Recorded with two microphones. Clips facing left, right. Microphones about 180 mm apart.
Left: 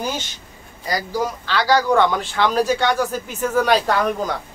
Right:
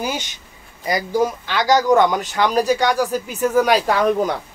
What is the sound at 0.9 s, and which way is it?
A man's voice, 20° right (ahead or behind).